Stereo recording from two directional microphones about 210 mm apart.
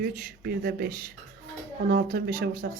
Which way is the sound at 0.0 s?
45° right (ahead or behind).